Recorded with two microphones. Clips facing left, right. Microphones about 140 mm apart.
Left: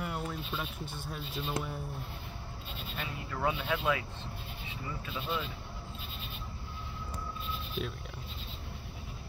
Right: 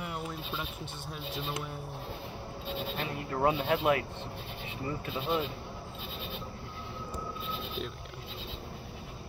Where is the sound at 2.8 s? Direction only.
45° right (ahead or behind).